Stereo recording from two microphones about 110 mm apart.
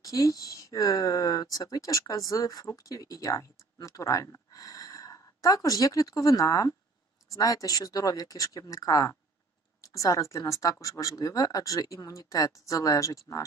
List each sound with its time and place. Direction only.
0.0 s speech: 30° left (ahead or behind)